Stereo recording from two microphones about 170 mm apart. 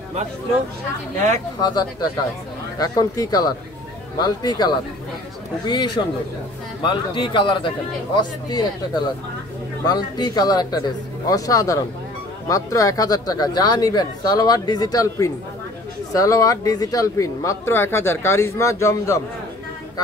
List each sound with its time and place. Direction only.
1.6 s speech: 25° left (ahead or behind)